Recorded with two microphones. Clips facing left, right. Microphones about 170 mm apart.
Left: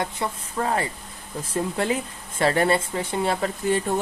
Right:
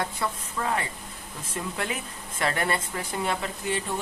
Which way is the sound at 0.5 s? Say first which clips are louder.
Left 7 dB; 35° left (ahead or behind).